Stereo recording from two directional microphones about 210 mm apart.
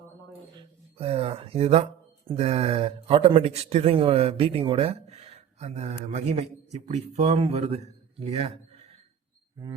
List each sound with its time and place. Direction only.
0.9 s a man's voice: 30° right (ahead or behind)